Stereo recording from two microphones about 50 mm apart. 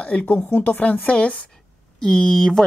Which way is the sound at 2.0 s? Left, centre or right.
Centre.